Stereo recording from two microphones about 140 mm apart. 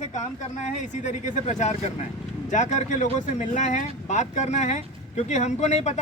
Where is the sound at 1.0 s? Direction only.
60° left (ahead or behind).